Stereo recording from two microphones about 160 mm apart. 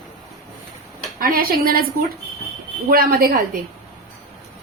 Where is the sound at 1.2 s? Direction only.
65° right (ahead or behind).